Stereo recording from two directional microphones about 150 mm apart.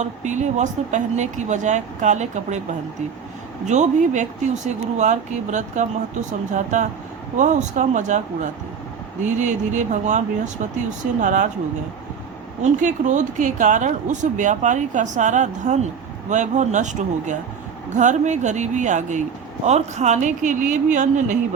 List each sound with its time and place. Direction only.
0.0 s speech: 55° right (ahead or behind)
3.7 s speech: 50° right (ahead or behind)
12.7 s speech: 55° right (ahead or behind)